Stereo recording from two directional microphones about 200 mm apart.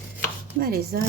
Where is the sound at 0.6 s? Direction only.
50° right (ahead or behind).